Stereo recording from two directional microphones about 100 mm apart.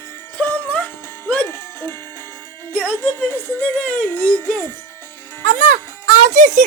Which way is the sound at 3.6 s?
15° left (ahead or behind).